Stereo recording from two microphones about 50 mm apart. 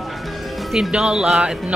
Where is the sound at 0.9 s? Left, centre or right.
Centre.